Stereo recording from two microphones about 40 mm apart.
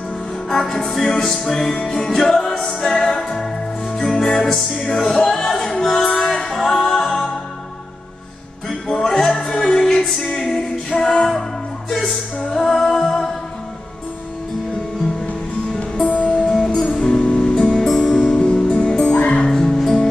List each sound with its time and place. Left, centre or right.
0.5 s music: centre
8.6 s music: centre
16.1 s music: left
16.4 s music: centre
19.1 s music: left
19.4 s music: centre